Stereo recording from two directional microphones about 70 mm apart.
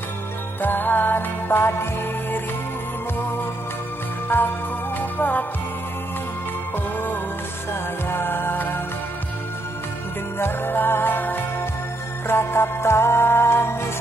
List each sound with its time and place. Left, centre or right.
0.6 s music: left
4.3 s music: left
7.7 s music: left
10.4 s music: left